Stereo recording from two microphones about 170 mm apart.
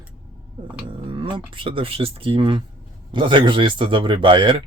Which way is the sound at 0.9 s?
30° right (ahead or behind).